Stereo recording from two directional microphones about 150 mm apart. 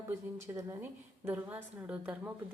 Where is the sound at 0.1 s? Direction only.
20° right (ahead or behind).